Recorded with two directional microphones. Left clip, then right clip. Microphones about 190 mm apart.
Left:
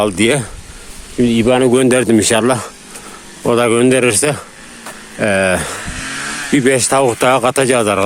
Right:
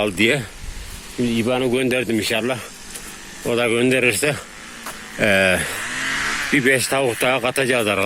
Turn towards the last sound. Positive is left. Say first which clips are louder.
# left 6 dB
turn(degrees=15)  # may be behind; listen again after turning